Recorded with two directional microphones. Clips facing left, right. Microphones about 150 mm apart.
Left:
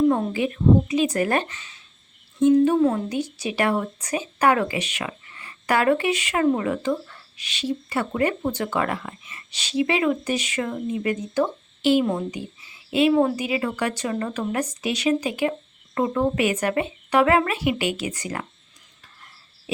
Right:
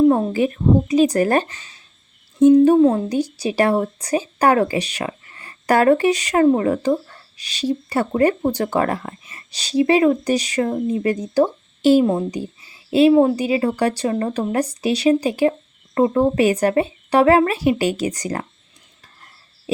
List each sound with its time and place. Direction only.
0.0 s a woman's voice: 30° right (ahead or behind)
2.7 s a woman's voice: 25° right (ahead or behind)